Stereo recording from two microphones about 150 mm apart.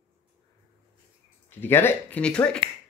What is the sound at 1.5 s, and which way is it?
Speech, 15° left (ahead or behind).